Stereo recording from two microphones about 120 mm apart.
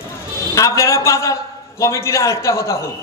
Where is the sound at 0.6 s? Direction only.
25° left (ahead or behind).